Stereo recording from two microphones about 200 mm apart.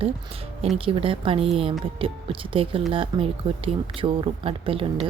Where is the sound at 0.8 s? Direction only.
25° right (ahead or behind).